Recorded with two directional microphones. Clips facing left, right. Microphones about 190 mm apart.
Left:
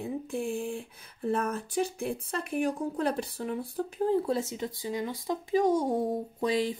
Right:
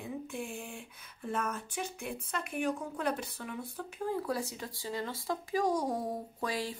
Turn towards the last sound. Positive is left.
turn(degrees=20)  # may be behind; listen again after turning